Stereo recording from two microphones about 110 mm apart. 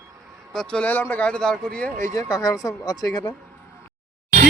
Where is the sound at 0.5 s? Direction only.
5° left (ahead or behind).